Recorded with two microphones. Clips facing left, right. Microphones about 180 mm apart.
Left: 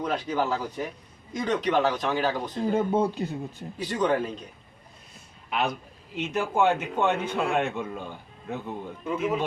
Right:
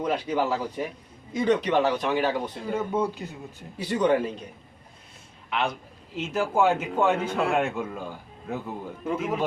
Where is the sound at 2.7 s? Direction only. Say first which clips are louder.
Left 2 dB; 35° left (ahead or behind).